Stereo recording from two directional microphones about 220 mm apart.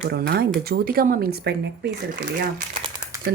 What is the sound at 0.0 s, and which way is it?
A woman's voice, 45° right (ahead or behind).